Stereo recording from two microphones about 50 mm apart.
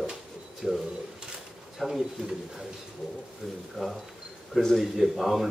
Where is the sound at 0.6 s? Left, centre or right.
Centre.